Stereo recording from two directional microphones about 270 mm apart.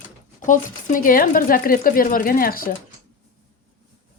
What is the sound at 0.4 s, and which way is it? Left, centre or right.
Speech, left.